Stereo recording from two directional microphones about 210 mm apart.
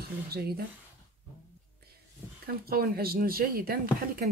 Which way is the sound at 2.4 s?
45° right (ahead or behind).